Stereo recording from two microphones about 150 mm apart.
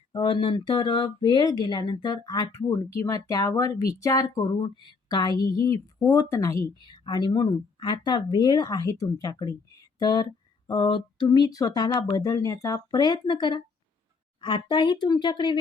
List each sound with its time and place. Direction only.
0.1 s speech: 35° left (ahead or behind)